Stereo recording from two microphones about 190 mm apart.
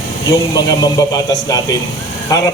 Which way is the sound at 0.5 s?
20° left (ahead or behind).